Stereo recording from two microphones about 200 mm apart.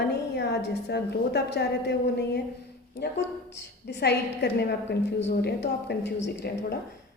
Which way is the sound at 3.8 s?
55° left (ahead or behind).